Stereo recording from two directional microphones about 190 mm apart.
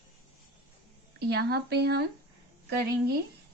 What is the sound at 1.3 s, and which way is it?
Speech, 60° right (ahead or behind).